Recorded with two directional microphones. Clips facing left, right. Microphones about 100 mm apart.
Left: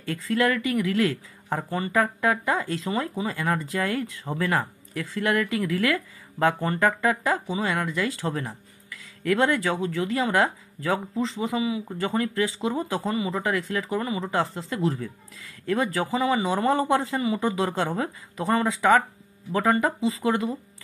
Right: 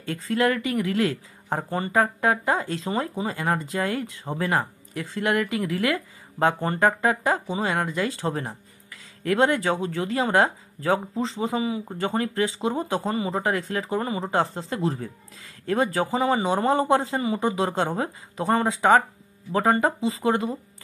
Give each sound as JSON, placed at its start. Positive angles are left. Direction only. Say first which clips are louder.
{"t": 0.0, "sound": "speech", "louder": "right 1 dB", "side_deg": -25}